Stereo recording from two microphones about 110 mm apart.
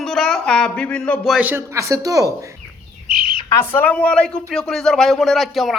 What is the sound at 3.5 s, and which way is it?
Speech, 20° left (ahead or behind).